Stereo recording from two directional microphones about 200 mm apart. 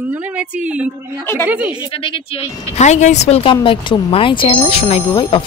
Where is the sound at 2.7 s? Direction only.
35° left (ahead or behind).